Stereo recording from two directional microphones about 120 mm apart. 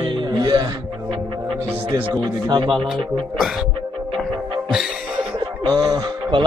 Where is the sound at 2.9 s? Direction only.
Centre (ahead or behind).